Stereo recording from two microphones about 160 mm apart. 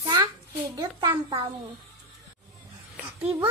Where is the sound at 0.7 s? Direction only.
25° right (ahead or behind).